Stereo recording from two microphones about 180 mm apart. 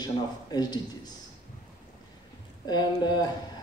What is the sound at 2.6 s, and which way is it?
Speech, 25° left (ahead or behind).